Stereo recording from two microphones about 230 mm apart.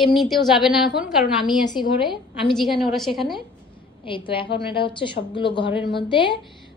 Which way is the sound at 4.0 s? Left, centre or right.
Left.